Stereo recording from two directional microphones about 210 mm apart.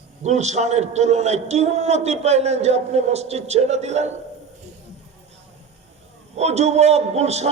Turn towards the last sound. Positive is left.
turn(degrees=-30)  # may be behind; listen again after turning